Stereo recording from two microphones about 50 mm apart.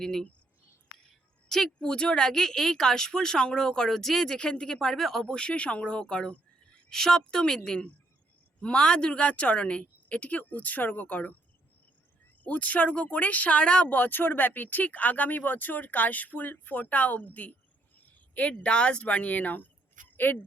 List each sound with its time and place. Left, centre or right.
0.0 s speech: centre
1.5 s speech: centre
5.2 s speech: left
6.9 s speech: centre; by 11.3 s left
12.4 s speech: left
13.9 s speech: left